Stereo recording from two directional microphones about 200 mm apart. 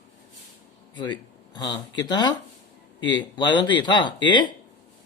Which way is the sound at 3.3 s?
20° left (ahead or behind).